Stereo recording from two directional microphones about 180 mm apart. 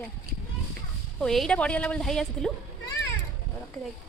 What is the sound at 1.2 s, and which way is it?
A woman's voice, 5° left (ahead or behind).